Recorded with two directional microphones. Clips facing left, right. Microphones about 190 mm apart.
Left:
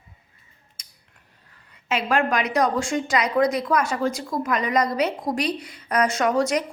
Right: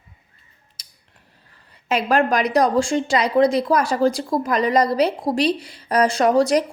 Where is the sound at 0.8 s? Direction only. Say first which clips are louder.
Right 1 dB; 35° right (ahead or behind).